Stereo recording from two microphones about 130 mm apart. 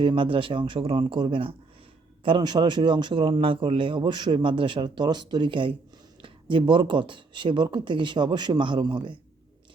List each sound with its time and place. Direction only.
0.0 s a man's voice: 40° right (ahead or behind)